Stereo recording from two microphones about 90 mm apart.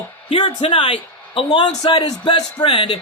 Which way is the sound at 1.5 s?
60° left (ahead or behind).